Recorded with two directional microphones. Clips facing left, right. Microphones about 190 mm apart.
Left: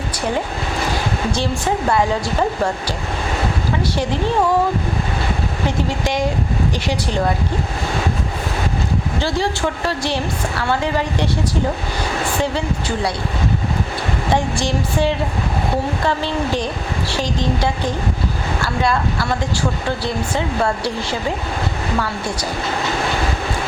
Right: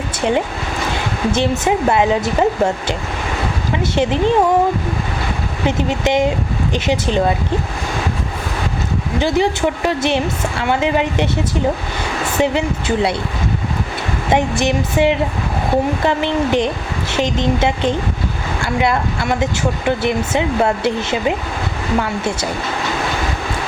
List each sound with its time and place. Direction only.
0.2 s a woman's voice: 20° right (ahead or behind)
3.9 s a woman's voice: 20° right (ahead or behind)
5.6 s a woman's voice: 20° right (ahead or behind)
9.1 s a woman's voice: 20° right (ahead or behind)
12.4 s a woman's voice: 20° right (ahead or behind)
14.3 s a woman's voice: 20° right (ahead or behind)